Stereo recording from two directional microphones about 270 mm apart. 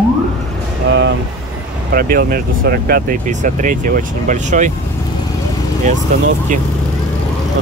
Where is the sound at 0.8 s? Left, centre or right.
Right.